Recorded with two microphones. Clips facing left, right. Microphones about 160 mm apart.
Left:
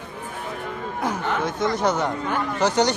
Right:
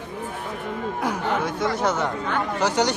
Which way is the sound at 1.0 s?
10° right (ahead or behind).